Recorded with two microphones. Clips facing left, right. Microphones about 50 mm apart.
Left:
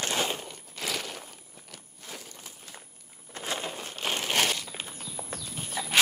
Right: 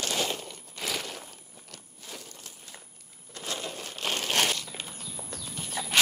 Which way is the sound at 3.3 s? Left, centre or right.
Left.